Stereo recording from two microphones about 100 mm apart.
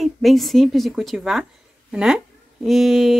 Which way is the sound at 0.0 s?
Centre (ahead or behind).